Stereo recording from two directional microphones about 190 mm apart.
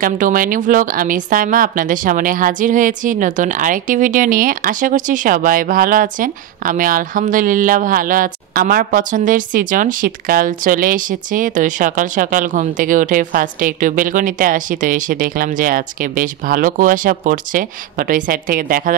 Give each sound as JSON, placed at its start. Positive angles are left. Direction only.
{"t": 0.0, "sound": "speech", "side_deg": -45}